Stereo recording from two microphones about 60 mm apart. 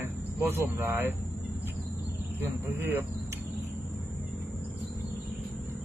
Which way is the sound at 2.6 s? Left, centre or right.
Right.